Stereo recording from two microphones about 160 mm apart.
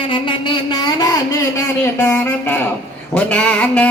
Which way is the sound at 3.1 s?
10° left (ahead or behind).